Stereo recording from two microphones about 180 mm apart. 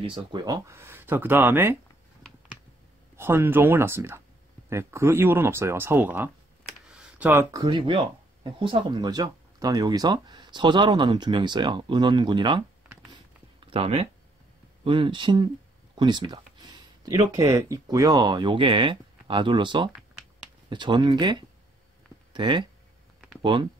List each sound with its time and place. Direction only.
0.0 s speech: 25° right (ahead or behind); by 1.8 s 10° right (ahead or behind)
2.2 s a sound: 5° left (ahead or behind)
3.2 s speech: 10° right (ahead or behind)
6.9 s computer keyboard: 5° right (ahead or behind)
7.6 s speech: 25° right (ahead or behind)